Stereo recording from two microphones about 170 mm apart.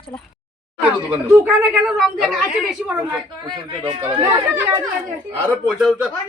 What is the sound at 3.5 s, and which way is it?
Speech, 30° right (ahead or behind).